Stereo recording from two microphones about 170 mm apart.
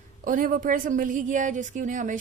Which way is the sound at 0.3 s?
55° right (ahead or behind).